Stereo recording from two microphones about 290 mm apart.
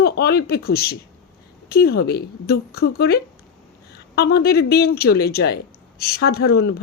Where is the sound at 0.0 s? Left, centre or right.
Left.